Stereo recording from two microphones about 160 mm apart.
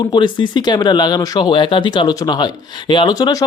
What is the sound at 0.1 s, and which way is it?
Speech, 30° left (ahead or behind).